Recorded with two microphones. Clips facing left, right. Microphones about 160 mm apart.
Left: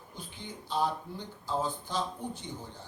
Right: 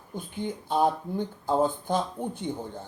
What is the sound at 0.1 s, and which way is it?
Speech, 50° right (ahead or behind).